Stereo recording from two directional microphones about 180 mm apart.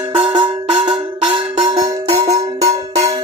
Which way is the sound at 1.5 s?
20° right (ahead or behind).